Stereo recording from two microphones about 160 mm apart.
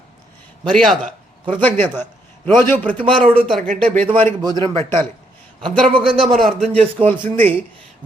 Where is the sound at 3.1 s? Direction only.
35° right (ahead or behind).